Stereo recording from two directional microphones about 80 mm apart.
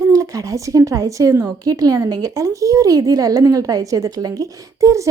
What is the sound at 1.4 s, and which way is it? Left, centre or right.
A woman's voice, right.